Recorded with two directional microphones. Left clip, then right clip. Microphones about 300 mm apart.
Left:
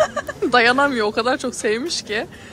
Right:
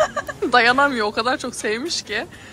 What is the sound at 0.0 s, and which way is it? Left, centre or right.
Speech, centre.